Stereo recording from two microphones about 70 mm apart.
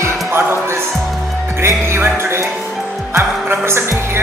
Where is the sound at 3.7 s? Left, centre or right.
Right.